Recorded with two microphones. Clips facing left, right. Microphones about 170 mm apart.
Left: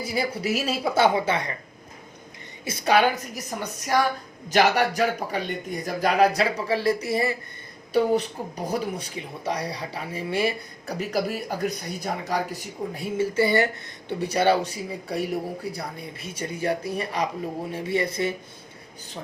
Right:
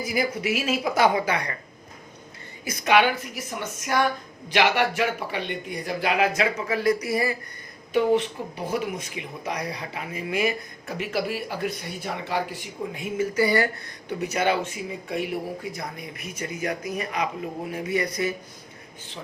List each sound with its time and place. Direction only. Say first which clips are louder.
0.0 s speech: right 1 dB; 30° left (ahead or behind)
2.6 s speech: even; 30° left (ahead or behind)
7.9 s speech: even; 40° left (ahead or behind)